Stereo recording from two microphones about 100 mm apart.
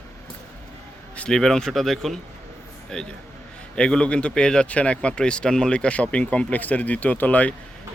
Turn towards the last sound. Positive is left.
turn(degrees=15)  # may be behind; listen again after turning